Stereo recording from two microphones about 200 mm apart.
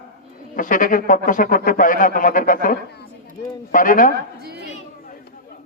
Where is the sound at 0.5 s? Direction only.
45° left (ahead or behind).